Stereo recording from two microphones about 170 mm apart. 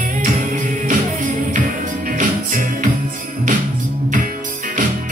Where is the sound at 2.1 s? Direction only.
50° right (ahead or behind).